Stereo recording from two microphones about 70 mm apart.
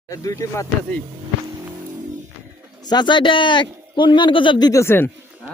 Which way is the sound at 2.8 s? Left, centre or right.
Left.